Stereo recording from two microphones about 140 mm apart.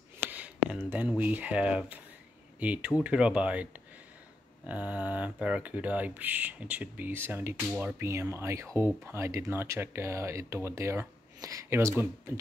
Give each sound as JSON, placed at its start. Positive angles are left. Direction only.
{"t": 0.7, "sound": "speech", "side_deg": -10}
{"t": 4.6, "sound": "speech", "side_deg": -10}